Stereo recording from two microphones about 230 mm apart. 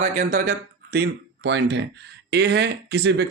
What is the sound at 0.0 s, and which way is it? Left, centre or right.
Speech, right.